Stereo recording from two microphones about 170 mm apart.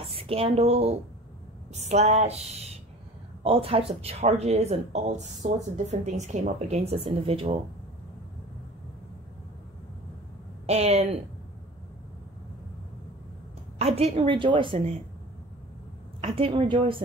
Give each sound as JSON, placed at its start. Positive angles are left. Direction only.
{"t": 0.0, "sound": "speech", "side_deg": -35}
{"t": 10.7, "sound": "speech", "side_deg": -35}
{"t": 13.7, "sound": "speech", "side_deg": -40}
{"t": 16.2, "sound": "speech", "side_deg": -35}